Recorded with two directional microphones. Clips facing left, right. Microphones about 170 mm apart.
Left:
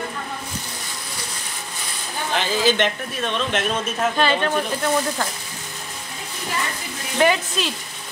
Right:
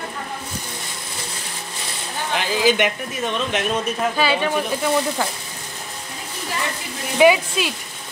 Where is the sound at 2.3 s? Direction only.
10° right (ahead or behind).